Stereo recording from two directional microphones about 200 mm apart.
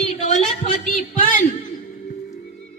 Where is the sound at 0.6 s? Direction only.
40° left (ahead or behind).